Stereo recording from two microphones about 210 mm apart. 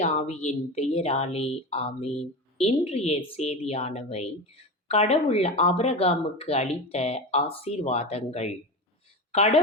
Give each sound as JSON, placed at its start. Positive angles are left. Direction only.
{"t": 0.0, "sound": "a woman's voice", "side_deg": 30}